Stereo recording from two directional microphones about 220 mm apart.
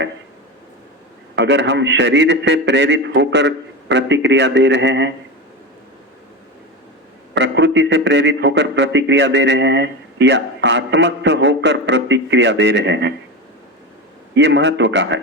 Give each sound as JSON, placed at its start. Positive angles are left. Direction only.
{"t": 1.4, "sound": "a man's voice", "side_deg": -50}
{"t": 7.3, "sound": "a man's voice", "side_deg": -55}
{"t": 14.3, "sound": "a man's voice", "side_deg": -55}